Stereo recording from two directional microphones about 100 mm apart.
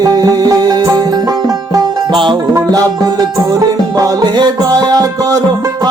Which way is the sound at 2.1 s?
50° right (ahead or behind).